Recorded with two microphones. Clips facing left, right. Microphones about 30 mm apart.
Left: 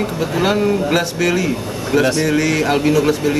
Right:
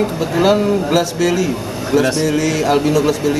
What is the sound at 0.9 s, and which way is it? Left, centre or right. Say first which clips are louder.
Cattle: right 1 dB; centre.